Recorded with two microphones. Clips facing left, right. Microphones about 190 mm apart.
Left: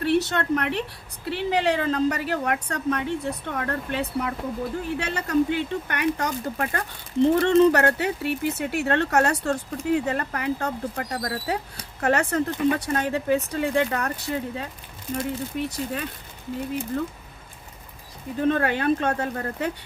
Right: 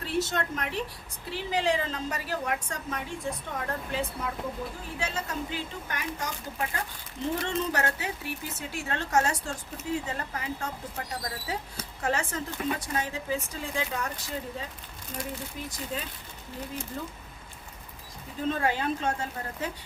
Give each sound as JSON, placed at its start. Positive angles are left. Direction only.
{"t": 0.0, "sound": "a woman's voice", "side_deg": 65}
{"t": 18.4, "sound": "a woman's voice", "side_deg": 65}